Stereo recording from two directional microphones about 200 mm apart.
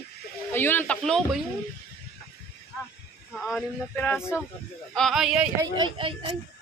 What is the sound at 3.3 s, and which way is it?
Speech, 5° left (ahead or behind).